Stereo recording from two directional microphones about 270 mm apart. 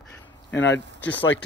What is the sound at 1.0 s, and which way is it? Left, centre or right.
Speech, centre.